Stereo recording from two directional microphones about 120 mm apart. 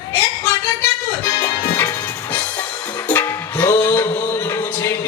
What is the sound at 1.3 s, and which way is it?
Music, 30° left (ahead or behind).